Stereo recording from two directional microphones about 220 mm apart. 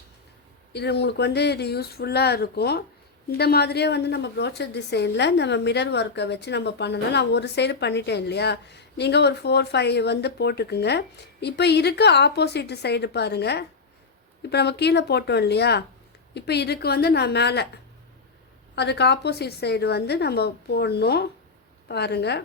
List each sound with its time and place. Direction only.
0.7 s a woman's voice: 50° left (ahead or behind)
18.8 s a woman's voice: 50° left (ahead or behind)